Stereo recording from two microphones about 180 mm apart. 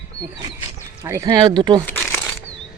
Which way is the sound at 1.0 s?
20° right (ahead or behind).